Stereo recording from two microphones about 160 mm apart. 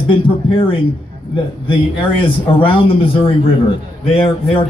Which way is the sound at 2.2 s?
35° left (ahead or behind).